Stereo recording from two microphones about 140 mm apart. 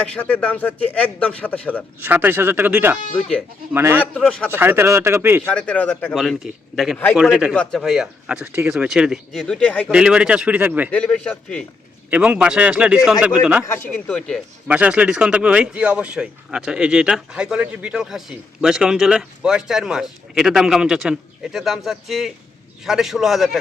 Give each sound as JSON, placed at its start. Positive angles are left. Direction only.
{"t": 0.1, "sound": "a man's voice", "side_deg": 10}
{"t": 2.0, "sound": "speech", "side_deg": -15}
{"t": 4.1, "sound": "a man's voice", "side_deg": 5}
{"t": 4.4, "sound": "speech", "side_deg": -15}
{"t": 5.5, "sound": "a man's voice", "side_deg": 10}
{"t": 6.1, "sound": "speech", "side_deg": 0}
{"t": 7.5, "sound": "speech", "side_deg": 5}
{"t": 9.9, "sound": "speech", "side_deg": -5}
{"t": 10.9, "sound": "a man's voice", "side_deg": 5}
{"t": 12.1, "sound": "speech", "side_deg": -10}
{"t": 13.7, "sound": "speech", "side_deg": 20}
{"t": 14.1, "sound": "speech", "side_deg": 5}
{"t": 14.7, "sound": "speech", "side_deg": -10}